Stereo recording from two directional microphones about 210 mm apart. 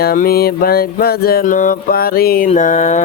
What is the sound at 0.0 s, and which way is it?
Speech, 45° left (ahead or behind).